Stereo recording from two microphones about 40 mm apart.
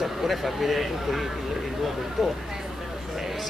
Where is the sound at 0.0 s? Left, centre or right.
Centre.